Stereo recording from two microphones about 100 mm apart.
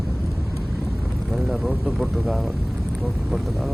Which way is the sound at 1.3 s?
Centre (ahead or behind).